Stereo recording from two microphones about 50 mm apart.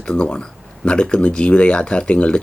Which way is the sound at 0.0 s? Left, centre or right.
Centre.